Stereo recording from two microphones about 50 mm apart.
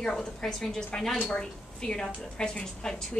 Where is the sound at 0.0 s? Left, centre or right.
Centre.